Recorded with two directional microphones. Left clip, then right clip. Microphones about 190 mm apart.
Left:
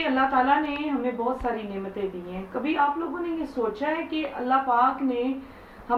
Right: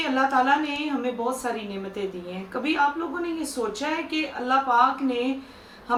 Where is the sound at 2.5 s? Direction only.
15° right (ahead or behind).